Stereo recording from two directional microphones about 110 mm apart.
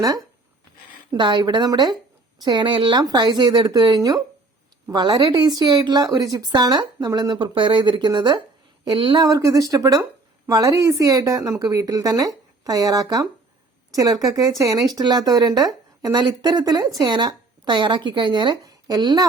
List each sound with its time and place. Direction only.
0.0 s speech: 35° right (ahead or behind)